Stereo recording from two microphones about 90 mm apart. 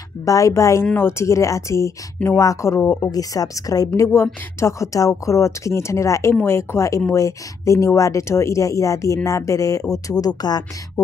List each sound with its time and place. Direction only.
0.2 s speech: 35° left (ahead or behind)
3.1 s speech: 40° left (ahead or behind)